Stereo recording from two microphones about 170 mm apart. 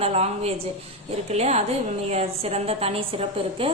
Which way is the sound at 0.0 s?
35° right (ahead or behind).